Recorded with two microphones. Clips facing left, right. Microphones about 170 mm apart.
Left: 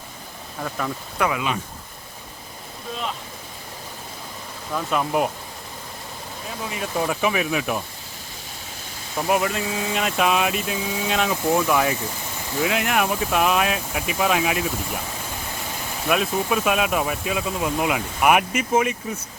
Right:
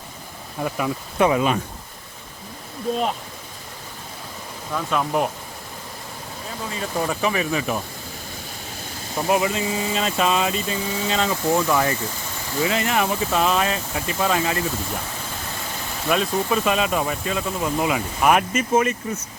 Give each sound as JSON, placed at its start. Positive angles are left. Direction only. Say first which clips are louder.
{"t": 1.2, "sound": "speech", "louder": "right 5 dB", "side_deg": -35}
{"t": 4.7, "sound": "speech", "louder": "even", "side_deg": 5}
{"t": 6.7, "sound": "speech", "louder": "even", "side_deg": 5}
{"t": 9.2, "sound": "speech", "louder": "right 1 dB", "side_deg": 0}
{"t": 16.0, "sound": "speech", "louder": "even", "side_deg": 5}